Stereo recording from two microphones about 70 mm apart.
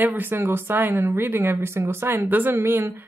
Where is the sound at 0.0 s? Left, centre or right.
Right.